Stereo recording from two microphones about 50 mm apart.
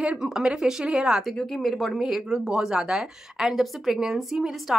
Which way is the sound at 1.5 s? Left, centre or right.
Centre.